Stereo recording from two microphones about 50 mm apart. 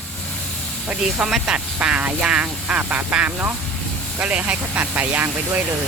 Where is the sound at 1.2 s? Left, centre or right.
Centre.